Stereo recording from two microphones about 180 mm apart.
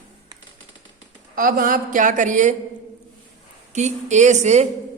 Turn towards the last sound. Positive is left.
turn(degrees=-40)  # may be behind; listen again after turning